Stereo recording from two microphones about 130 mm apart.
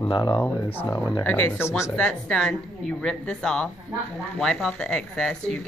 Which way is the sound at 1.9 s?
10° left (ahead or behind).